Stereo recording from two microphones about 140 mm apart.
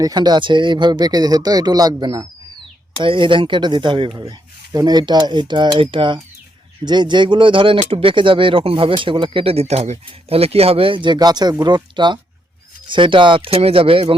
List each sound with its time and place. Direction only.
0.0 s speech: 30° right (ahead or behind)